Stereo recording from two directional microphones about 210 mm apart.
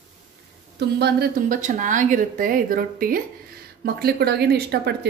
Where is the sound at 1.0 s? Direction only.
50° right (ahead or behind).